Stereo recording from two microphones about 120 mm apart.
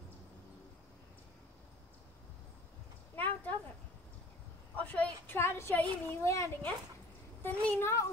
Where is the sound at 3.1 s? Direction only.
15° left (ahead or behind).